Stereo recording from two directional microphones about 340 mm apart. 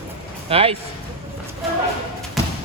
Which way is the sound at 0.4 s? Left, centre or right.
Centre.